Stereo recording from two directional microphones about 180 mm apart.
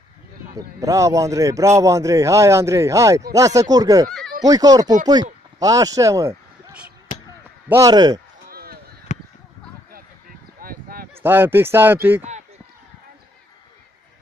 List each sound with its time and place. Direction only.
0.6 s a man's voice: 20° right (ahead or behind)
7.6 s speech: 15° right (ahead or behind)
8.5 s chop: 55° right (ahead or behind)
9.1 s a sound: 40° left (ahead or behind)
10.6 s a sound: 55° right (ahead or behind)
11.2 s a man's voice: 10° right (ahead or behind)
12.2 s speech: 40° right (ahead or behind)